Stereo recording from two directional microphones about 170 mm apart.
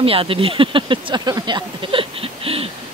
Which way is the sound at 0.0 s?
35° right (ahead or behind).